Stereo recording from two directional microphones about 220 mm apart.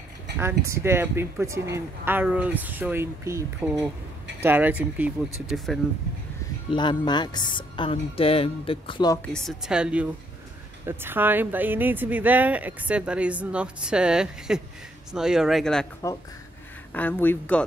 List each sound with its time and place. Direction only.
0.4 s speech: 10° right (ahead or behind)
6.7 s speech: 20° left (ahead or behind)
9.3 s a woman's voice: centre (ahead or behind)
16.9 s speech: 10° left (ahead or behind)